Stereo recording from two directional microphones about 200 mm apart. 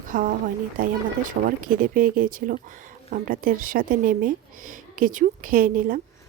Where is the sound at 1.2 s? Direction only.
45° right (ahead or behind).